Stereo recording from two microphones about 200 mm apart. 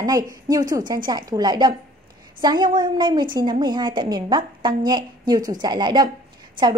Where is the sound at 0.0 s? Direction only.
20° right (ahead or behind).